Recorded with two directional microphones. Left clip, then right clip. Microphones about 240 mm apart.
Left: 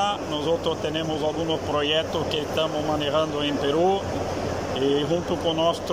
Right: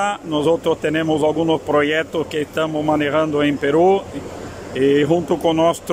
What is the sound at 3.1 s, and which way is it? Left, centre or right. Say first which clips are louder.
Speech: right 6 dB; right.